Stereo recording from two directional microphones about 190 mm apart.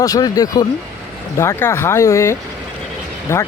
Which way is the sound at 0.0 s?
20° left (ahead or behind).